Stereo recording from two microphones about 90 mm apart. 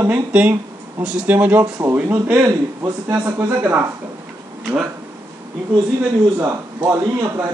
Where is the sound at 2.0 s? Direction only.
20° right (ahead or behind).